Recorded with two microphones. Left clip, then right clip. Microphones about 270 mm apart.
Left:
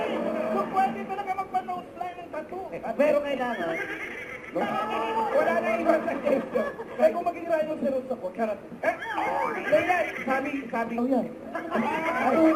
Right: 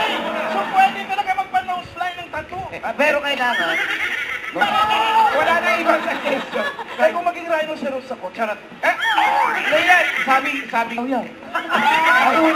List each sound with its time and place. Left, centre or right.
0.0 s music: centre
3.0 s speech: centre